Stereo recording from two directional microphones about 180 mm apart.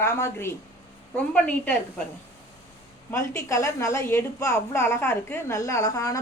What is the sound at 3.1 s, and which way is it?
A woman's voice, 15° left (ahead or behind).